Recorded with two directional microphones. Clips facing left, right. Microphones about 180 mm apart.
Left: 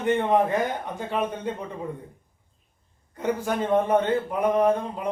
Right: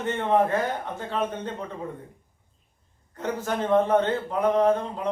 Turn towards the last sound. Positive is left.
turn(degrees=15)  # may be behind; listen again after turning